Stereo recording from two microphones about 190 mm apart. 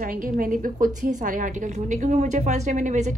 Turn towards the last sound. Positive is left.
turn(degrees=-40)  # may be behind; listen again after turning